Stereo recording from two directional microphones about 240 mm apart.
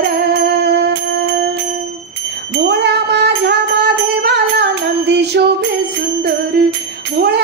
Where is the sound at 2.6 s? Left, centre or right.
Right.